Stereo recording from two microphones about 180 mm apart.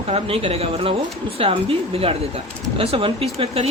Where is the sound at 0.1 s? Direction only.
35° right (ahead or behind).